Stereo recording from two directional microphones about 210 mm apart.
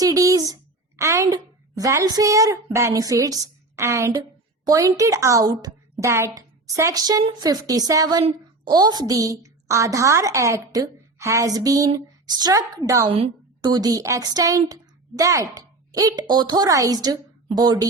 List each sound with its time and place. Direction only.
0.0 s a woman's voice: 15° right (ahead or behind)